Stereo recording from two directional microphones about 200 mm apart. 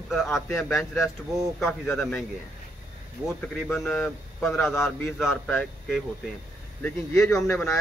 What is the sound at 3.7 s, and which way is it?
A man's voice, 10° left (ahead or behind).